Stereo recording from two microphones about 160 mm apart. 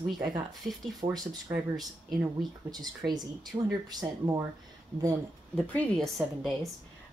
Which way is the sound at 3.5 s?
25° right (ahead or behind).